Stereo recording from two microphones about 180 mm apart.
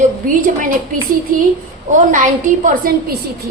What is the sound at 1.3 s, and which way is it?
A woman's voice, 50° right (ahead or behind).